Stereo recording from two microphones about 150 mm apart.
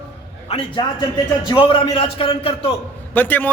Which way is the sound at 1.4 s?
30° left (ahead or behind).